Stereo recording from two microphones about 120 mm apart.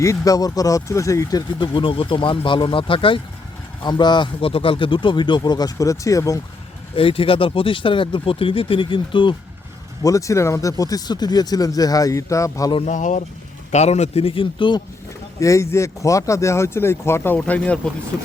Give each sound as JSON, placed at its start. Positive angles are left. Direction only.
{"t": 0.0, "sound": "speech", "side_deg": 25}
{"t": 6.9, "sound": "speech", "side_deg": 50}
{"t": 10.0, "sound": "speech", "side_deg": 30}
{"t": 12.8, "sound": "speech", "side_deg": 90}
{"t": 13.7, "sound": "speech", "side_deg": 70}
{"t": 15.4, "sound": "speech", "side_deg": 25}